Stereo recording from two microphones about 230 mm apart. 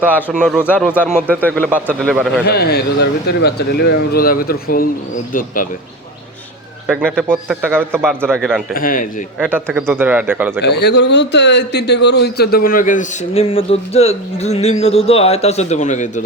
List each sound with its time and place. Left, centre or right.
0.0 s speech: centre
2.4 s a man's voice: left
6.8 s speech: centre
7.5 s speech: centre
8.7 s a man's voice: left
9.4 s speech: centre
10.6 s a man's voice: left